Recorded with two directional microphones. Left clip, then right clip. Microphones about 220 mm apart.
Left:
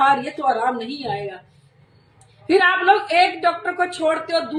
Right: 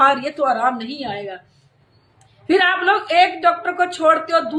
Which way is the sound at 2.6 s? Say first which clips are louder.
Left 3 dB; 5° right (ahead or behind).